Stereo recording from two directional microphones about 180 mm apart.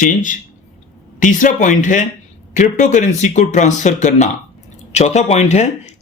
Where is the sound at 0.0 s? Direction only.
45° left (ahead or behind).